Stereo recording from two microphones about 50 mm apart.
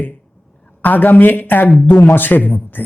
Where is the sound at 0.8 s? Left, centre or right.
Left.